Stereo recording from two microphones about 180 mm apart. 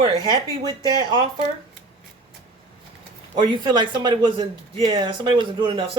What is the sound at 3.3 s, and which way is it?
Speech, 25° right (ahead or behind).